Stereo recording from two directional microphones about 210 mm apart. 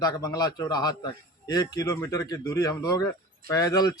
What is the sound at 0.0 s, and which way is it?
A man's voice, 15° left (ahead or behind).